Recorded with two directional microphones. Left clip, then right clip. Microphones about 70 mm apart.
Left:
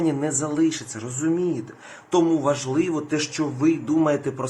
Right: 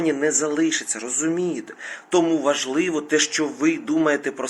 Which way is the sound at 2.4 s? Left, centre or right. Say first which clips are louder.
Right 1 dB; centre.